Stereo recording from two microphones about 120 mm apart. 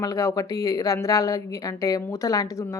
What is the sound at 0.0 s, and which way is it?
A woman's voice, 25° left (ahead or behind).